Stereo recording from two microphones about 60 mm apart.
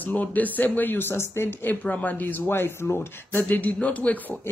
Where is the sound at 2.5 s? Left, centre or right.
Left.